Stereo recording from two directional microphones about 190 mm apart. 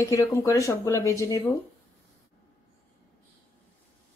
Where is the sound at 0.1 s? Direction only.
15° left (ahead or behind).